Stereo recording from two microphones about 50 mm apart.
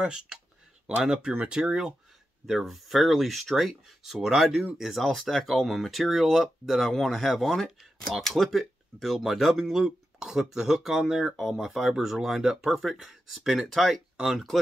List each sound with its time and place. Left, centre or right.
0.0 s speech: centre